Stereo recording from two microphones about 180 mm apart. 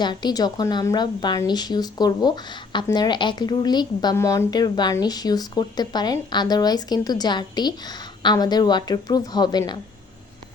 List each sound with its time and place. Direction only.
0.0 s a woman's voice: 25° left (ahead or behind)